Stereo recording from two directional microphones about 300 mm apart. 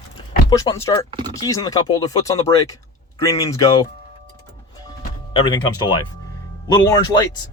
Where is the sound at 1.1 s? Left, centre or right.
Centre.